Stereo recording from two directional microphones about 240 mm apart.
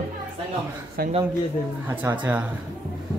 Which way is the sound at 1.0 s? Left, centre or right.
Right.